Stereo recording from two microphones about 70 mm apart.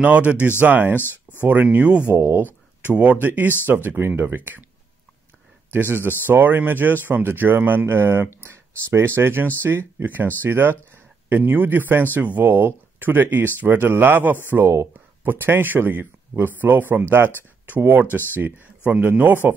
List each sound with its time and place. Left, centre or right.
0.0 s speech: right
0.9 s speech: left
1.4 s speech: right
5.7 s speech: right
18.0 s speech: left
18.3 s speech: right